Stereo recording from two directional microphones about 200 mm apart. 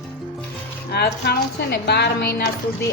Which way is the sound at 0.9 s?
55° left (ahead or behind).